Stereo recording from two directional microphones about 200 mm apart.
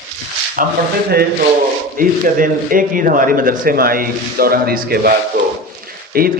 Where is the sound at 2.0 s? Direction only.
45° right (ahead or behind).